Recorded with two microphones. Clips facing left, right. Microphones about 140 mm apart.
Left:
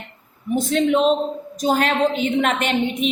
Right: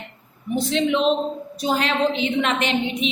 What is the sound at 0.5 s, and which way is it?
A woman's voice, 45° left (ahead or behind).